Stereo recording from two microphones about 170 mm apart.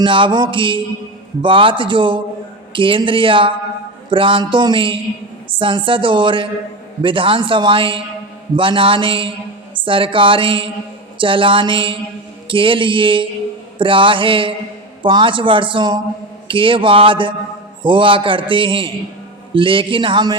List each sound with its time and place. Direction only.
0.0 s a woman's voice: 30° right (ahead or behind)